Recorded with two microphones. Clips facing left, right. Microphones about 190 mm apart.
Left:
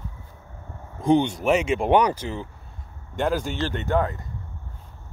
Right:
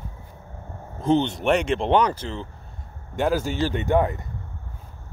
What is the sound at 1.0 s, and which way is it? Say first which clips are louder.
Speech: left 1 dB; 15° left (ahead or behind).